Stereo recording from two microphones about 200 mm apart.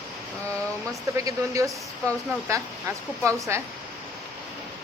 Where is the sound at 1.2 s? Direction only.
15° right (ahead or behind).